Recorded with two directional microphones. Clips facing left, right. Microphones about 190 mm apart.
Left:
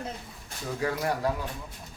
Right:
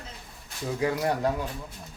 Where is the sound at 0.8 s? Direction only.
20° right (ahead or behind).